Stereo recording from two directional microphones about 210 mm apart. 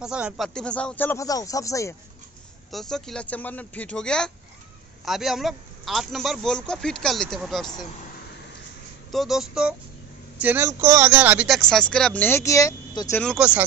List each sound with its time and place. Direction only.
0.0 s speech: 5° right (ahead or behind); by 2.0 s 15° left (ahead or behind)
2.7 s speech: centre (ahead or behind)
9.1 s speech: centre (ahead or behind); by 13.2 s 15° left (ahead or behind)
13.2 s speech: centre (ahead or behind)